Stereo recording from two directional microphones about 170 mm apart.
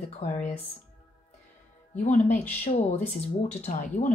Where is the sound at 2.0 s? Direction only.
45° left (ahead or behind).